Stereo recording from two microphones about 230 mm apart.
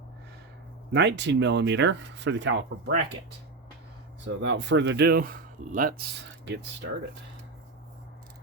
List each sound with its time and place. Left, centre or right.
0.9 s speech: right
4.4 s speech: right
6.4 s speech: right